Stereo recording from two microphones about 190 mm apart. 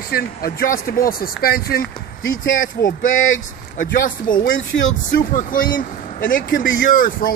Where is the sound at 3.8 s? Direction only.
50° left (ahead or behind).